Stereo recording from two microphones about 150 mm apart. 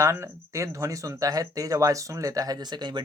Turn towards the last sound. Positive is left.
turn(degrees=-30)  # may be behind; listen again after turning